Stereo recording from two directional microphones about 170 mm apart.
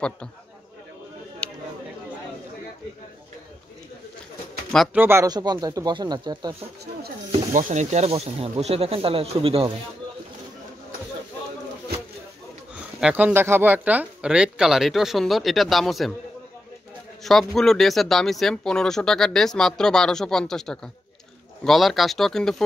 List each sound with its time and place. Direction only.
4.9 s speech: 15° right (ahead or behind)
7.5 s speech: 45° right (ahead or behind)
13.0 s speech: 10° right (ahead or behind)
17.2 s speech: centre (ahead or behind)